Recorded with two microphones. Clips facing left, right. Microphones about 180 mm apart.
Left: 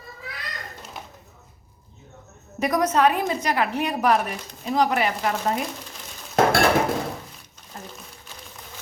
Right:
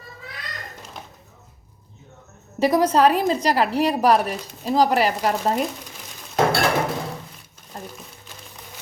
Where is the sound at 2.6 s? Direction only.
30° right (ahead or behind).